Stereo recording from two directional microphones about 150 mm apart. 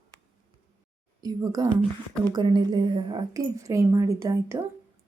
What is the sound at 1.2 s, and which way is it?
A woman's voice, 25° right (ahead or behind).